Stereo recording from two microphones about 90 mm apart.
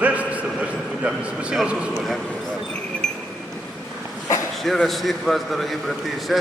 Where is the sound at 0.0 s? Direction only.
15° right (ahead or behind).